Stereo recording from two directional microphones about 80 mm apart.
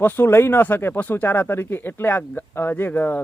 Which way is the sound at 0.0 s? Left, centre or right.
Left.